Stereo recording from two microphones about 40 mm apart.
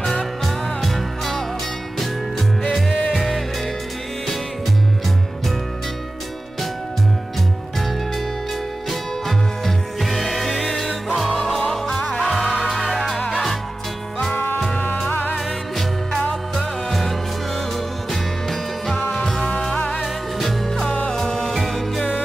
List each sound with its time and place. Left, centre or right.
0.0 s music: centre
3.1 s music: centre
9.7 s music: centre
14.3 s music: left
16.1 s music: left
16.5 s music: centre
19.1 s music: centre